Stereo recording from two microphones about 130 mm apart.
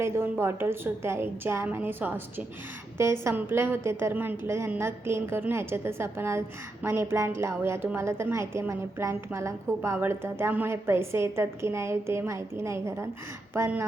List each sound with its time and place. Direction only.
0.0 s a woman's voice: 20° right (ahead or behind)